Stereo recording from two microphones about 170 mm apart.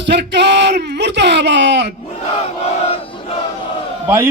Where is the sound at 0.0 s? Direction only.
90° right.